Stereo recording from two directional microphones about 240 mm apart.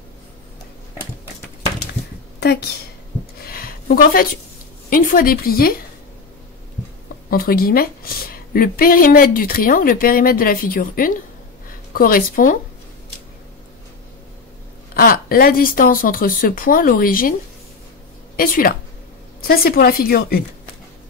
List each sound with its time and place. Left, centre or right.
2.4 s a woman's voice: left
3.4 s a sound: left
4.8 s a woman's voice: left
7.2 s a woman's voice: left
15.0 s a woman's voice: left
18.3 s a woman's voice: left